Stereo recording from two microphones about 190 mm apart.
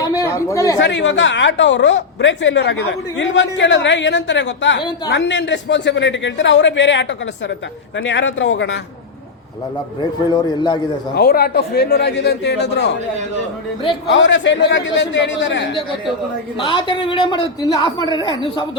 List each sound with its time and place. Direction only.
0.2 s speech: 15° left (ahead or behind)
0.8 s a woman's voice: 70° left (ahead or behind)
10.0 s a man's voice: 20° left (ahead or behind)
11.1 s a man's voice: 55° left (ahead or behind)
14.1 s a woman's voice: 75° left (ahead or behind)
16.6 s a man's voice: 25° left (ahead or behind)